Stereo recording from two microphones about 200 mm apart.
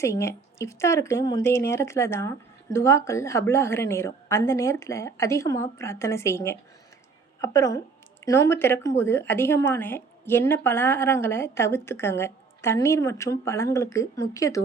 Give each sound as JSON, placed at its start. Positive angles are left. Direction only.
{"t": 0.0, "sound": "speech", "side_deg": 15}